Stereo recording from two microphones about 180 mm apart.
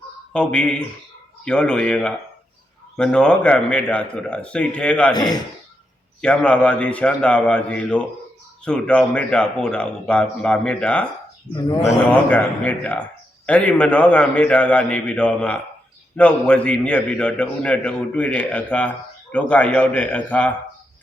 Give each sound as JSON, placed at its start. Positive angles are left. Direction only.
{"t": 0.3, "sound": "a man's voice", "side_deg": 5}
{"t": 5.1, "sound": "speech", "side_deg": 20}
{"t": 6.2, "sound": "a man's voice", "side_deg": 5}